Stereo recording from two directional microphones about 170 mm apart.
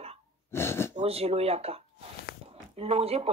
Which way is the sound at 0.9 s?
35° right (ahead or behind).